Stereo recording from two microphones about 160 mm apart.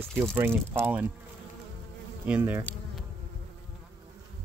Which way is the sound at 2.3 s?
10° right (ahead or behind).